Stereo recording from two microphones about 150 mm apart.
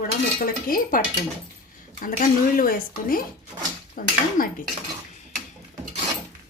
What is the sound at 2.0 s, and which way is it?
Speech, 70° left (ahead or behind).